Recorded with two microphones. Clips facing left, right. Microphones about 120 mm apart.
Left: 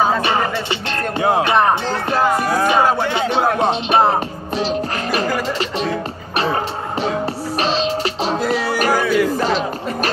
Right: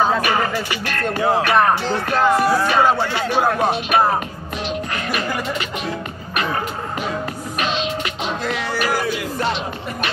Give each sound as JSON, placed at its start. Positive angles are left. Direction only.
{"t": 0.2, "sound": "music", "side_deg": 25}
{"t": 3.0, "sound": "chatter", "side_deg": 20}
{"t": 3.5, "sound": "music", "side_deg": 20}